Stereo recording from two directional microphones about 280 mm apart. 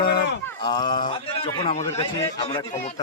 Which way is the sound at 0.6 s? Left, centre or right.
Centre.